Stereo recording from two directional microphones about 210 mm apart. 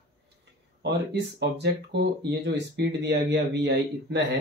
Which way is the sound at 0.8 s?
55° right (ahead or behind).